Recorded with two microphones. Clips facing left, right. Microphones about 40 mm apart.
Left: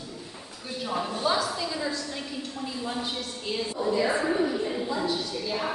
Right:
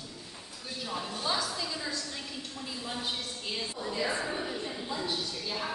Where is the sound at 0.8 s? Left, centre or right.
Centre.